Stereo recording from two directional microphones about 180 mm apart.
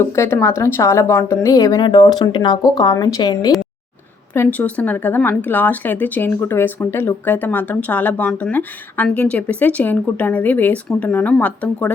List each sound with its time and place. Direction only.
0.0 s speech: 15° left (ahead or behind)
4.4 s speech: 10° left (ahead or behind)